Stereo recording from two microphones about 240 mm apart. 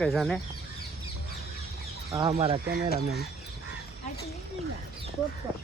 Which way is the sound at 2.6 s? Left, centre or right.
Right.